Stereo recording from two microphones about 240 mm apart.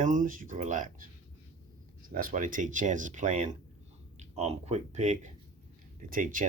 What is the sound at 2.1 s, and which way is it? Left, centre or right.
Speech, right.